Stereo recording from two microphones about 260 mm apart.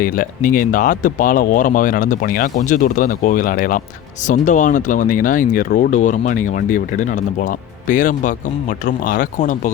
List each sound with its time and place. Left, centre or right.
0.0 s speech: left